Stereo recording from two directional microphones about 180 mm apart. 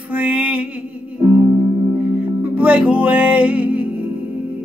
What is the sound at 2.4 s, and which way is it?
Music, 10° right (ahead or behind).